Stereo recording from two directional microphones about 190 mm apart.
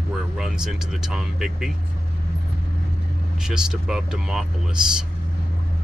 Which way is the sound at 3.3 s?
5° right (ahead or behind).